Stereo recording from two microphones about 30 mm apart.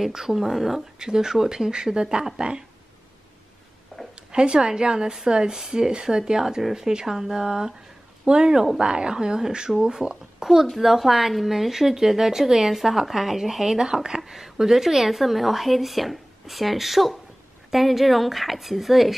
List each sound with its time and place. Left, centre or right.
0.1 s speech: centre
0.9 s speech: right
1.7 s speech: right
4.1 s speech: right
10.4 s speech: centre
13.7 s speech: right; by 19.1 s centre